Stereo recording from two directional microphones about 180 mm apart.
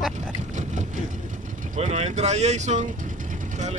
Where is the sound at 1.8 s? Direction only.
35° right (ahead or behind).